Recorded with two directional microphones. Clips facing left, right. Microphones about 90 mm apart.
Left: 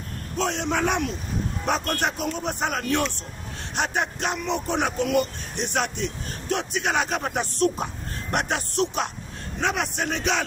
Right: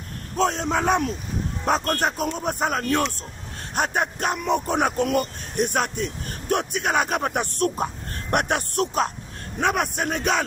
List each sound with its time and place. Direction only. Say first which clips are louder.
0.4 s a man's voice: right 2 dB; 40° right (ahead or behind)